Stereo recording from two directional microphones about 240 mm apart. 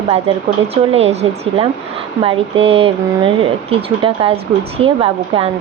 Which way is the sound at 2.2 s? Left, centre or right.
Right.